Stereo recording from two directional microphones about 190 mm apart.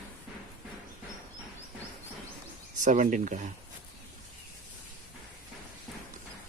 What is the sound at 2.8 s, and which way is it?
Speech, 40° right (ahead or behind).